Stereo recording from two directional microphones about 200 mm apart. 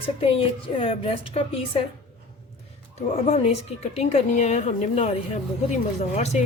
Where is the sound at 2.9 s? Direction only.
30° left (ahead or behind).